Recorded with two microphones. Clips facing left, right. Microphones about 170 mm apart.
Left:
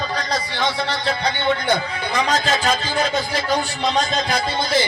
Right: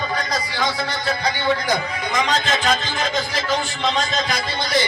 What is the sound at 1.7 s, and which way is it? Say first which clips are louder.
A man's voice: left 1 dB; 30° left (ahead or behind).